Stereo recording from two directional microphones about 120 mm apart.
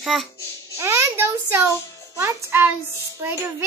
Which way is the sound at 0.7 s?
25° right (ahead or behind).